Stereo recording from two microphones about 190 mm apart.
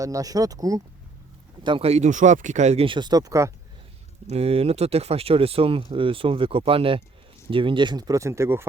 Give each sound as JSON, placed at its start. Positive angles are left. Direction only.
{"t": 0.0, "sound": "speech", "side_deg": -20}
{"t": 4.3, "sound": "speech", "side_deg": -30}